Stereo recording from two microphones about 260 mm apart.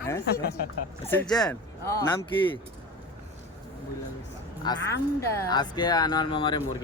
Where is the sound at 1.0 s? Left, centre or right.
Centre.